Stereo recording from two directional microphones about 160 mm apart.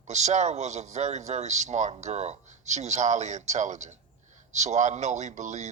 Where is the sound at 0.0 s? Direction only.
45° right (ahead or behind).